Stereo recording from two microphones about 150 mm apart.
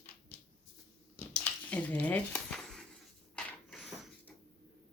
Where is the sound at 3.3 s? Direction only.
5° left (ahead or behind).